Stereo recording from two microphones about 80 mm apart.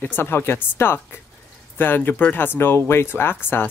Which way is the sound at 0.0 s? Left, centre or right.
Left.